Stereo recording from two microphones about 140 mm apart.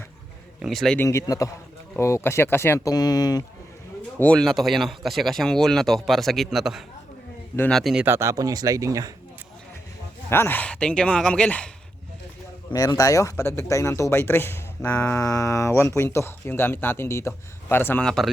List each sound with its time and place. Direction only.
0.6 s speech: centre (ahead or behind)
0.9 s speech: 20° left (ahead or behind)
4.2 s speech: 5° left (ahead or behind)
8.0 s speech: 20° right (ahead or behind)
10.2 s speech: 15° left (ahead or behind)
12.7 s speech: 25° left (ahead or behind)
15.2 s speech: 25° left (ahead or behind)
18.0 s speech: 5° left (ahead or behind)